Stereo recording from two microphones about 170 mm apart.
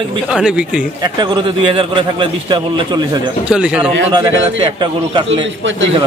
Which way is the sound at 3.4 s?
5° right (ahead or behind).